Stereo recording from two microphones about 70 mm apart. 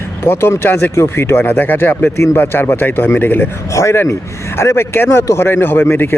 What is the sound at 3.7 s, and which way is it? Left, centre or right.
Speech, left.